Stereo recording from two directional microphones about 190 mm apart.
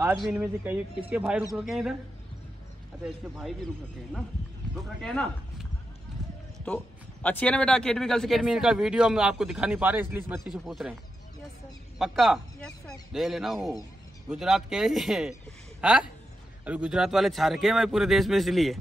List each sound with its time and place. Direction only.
0.1 s a man's voice: centre (ahead or behind)
5.0 s a man's voice: 5° left (ahead or behind)
7.2 s a man's voice: 5° left (ahead or behind)
12.0 s a man's voice: centre (ahead or behind)